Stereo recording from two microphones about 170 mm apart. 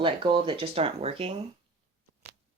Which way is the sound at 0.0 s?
30° right (ahead or behind).